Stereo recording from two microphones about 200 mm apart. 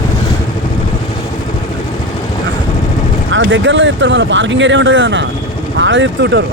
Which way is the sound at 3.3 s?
70° right (ahead or behind).